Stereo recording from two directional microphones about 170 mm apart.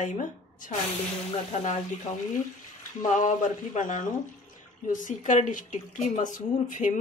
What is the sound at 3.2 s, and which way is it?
Speech, 45° left (ahead or behind).